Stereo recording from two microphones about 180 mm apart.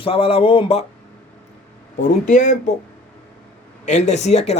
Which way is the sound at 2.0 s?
45° left (ahead or behind).